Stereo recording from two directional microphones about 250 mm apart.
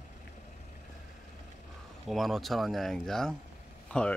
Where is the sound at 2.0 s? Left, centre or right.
Centre.